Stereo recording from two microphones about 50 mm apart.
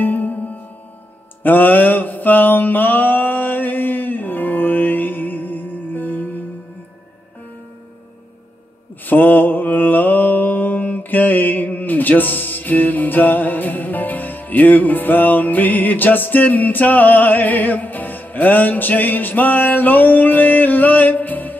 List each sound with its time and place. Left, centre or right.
0.0 s music: left
1.4 s mantra: left
9.0 s mantra: left